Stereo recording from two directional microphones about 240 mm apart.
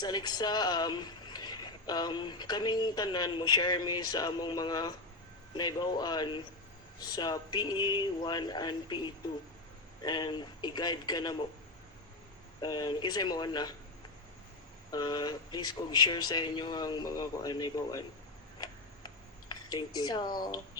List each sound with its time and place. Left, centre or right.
0.0 s speech: centre
12.5 s speech: centre
14.8 s speech: centre
19.5 s speech: centre